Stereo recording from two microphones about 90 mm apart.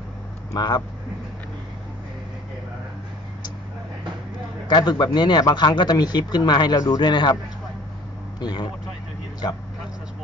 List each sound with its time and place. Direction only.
0.6 s speech: 50° left (ahead or behind)
4.6 s speech: 50° left (ahead or behind)
7.1 s speech: 60° left (ahead or behind)
8.4 s speech: 50° left (ahead or behind)